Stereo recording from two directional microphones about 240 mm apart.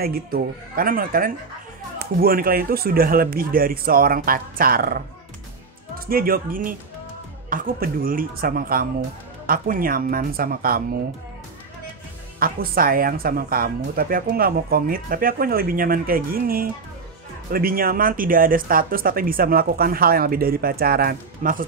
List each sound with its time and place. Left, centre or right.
0.0 s speech: right
6.0 s speech: right
12.4 s speech: right